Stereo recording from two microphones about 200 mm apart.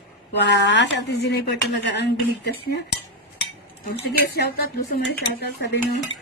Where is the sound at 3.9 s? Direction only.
55° left (ahead or behind).